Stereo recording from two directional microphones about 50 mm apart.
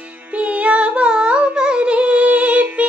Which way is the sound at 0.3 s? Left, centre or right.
Right.